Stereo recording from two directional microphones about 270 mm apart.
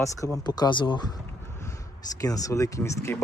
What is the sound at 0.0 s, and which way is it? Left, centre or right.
Speech, centre.